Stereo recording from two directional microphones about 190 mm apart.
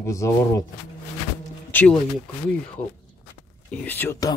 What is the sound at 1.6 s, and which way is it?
Speech, 5° left (ahead or behind).